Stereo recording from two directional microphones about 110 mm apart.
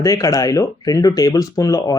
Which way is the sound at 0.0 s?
30° left (ahead or behind).